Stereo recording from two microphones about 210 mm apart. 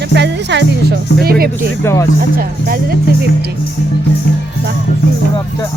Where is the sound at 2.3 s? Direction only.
45° right (ahead or behind).